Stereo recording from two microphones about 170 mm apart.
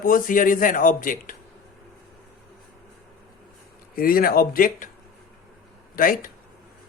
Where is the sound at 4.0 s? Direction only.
60° left (ahead or behind).